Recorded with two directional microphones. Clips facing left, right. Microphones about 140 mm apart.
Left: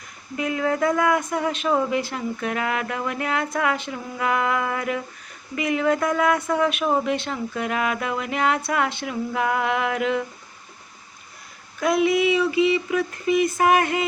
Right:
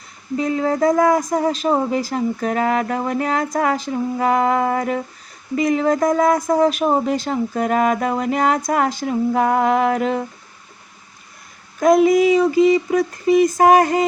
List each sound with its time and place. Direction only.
0.3 s speech: 30° right (ahead or behind)
11.8 s speech: 45° right (ahead or behind)